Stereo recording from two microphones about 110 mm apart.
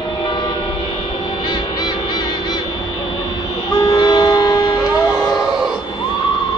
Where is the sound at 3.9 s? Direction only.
40° left (ahead or behind).